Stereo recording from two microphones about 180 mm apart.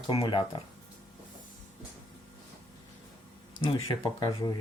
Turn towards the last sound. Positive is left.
turn(degrees=25)  # may be behind; listen again after turning